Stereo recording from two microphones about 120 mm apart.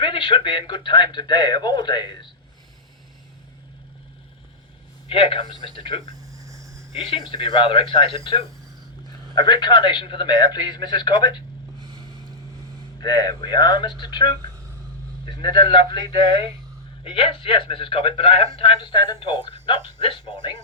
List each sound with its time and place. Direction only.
0.0 s speech: 45° left (ahead or behind)
5.0 s speech: 50° left (ahead or behind)
6.3 s a sound: 25° right (ahead or behind)
7.0 s speech: 50° left (ahead or behind)
9.3 s speech: 35° left (ahead or behind)
11.8 s vehicle: 35° right (ahead or behind)
13.0 s speech: 35° left (ahead or behind)